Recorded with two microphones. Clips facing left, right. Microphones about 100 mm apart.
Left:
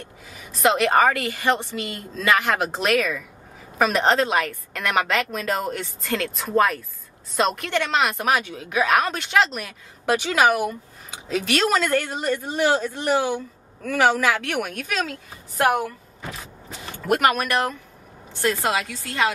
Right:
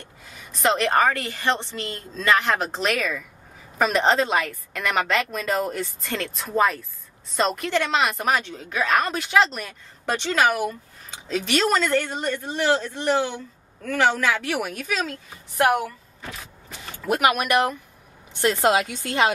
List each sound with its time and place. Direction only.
0.3 s a woman's voice: centre (ahead or behind)
17.2 s a woman's voice: 10° right (ahead or behind)